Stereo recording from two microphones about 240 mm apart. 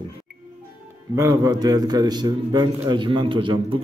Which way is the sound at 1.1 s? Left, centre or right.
Centre.